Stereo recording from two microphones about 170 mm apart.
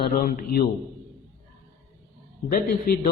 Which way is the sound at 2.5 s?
50° left (ahead or behind).